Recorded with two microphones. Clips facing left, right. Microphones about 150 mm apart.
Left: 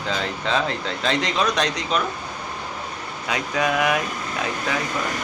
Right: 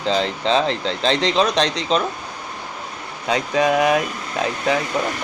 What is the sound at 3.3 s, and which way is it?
Speech, 30° right (ahead or behind).